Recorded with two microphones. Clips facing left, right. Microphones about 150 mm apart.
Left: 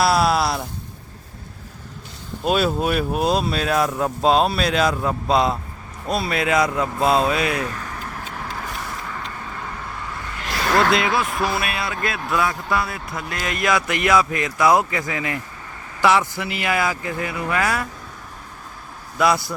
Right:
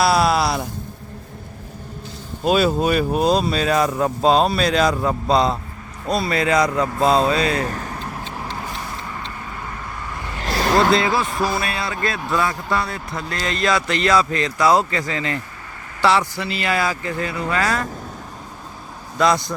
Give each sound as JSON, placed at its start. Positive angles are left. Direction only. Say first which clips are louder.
{"t": 0.0, "sound": "a sound", "louder": "right 1 dB", "side_deg": 0}
{"t": 2.4, "sound": "speech", "louder": "right 3 dB", "side_deg": 0}
{"t": 7.6, "sound": "speech", "louder": "right 3 dB", "side_deg": -40}
{"t": 10.4, "sound": "vehicle", "louder": "right 2 dB", "side_deg": -35}
{"t": 10.9, "sound": "a man's voice", "louder": "right 2 dB", "side_deg": 0}
{"t": 19.2, "sound": "a man's voice", "louder": "right 1 dB", "side_deg": 5}